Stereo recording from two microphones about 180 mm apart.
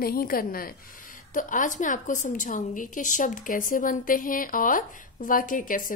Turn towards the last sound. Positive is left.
turn(degrees=50)  # may be behind; listen again after turning